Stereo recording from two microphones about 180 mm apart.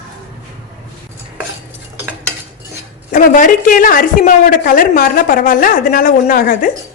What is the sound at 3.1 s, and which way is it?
Speech, 50° left (ahead or behind).